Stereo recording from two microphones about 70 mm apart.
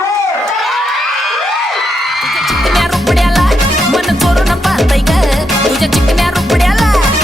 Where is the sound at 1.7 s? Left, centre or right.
Centre.